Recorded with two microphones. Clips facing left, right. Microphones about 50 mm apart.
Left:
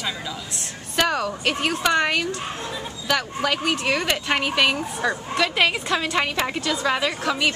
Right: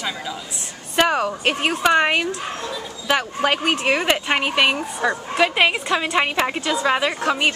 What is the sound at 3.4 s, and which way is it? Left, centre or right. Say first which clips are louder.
Speech: right 3 dB; right.